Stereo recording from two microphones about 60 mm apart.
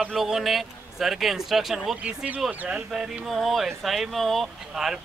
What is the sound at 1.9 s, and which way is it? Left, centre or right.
Speech, right.